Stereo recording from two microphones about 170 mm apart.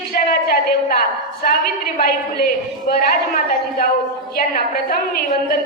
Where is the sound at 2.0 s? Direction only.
60° left (ahead or behind).